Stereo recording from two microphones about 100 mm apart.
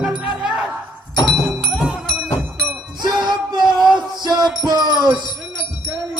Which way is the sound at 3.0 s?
45° right (ahead or behind).